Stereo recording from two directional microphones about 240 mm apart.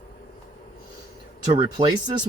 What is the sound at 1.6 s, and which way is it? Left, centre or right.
Speech, right.